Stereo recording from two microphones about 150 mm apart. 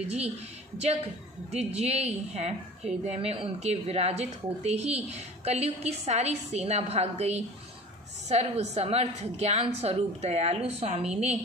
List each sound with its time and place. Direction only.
0.7 s a woman's voice: 45° right (ahead or behind)